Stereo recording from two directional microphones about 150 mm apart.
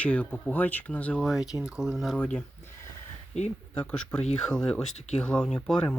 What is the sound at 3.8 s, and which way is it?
Speech, 5° left (ahead or behind).